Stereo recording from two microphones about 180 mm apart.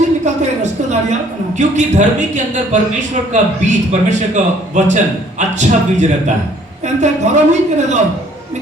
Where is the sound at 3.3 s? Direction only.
40° right (ahead or behind).